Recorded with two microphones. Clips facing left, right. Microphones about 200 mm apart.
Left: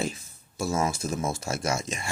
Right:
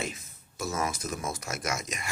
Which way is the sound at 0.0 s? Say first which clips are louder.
Left 5 dB; 30° left (ahead or behind).